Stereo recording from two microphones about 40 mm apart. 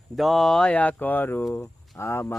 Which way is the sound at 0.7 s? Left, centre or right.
Left.